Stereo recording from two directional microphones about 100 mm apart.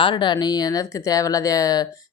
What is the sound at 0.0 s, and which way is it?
Speech, 50° left (ahead or behind).